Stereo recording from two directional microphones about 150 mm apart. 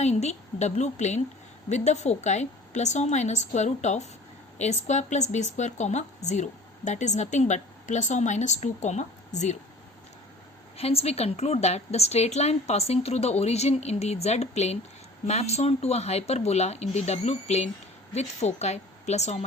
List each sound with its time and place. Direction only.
0.0 s a woman's voice: 50° left (ahead or behind)
10.8 s a woman's voice: 45° left (ahead or behind)